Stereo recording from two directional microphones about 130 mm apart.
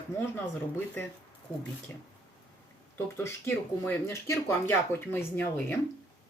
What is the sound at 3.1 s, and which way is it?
Speech, 20° left (ahead or behind).